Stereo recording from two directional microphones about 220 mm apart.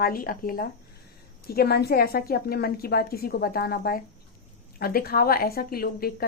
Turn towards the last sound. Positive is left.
turn(degrees=45)  # may be behind; listen again after turning